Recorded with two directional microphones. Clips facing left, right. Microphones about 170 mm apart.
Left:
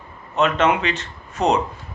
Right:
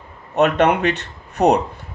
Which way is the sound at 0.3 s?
60° right (ahead or behind).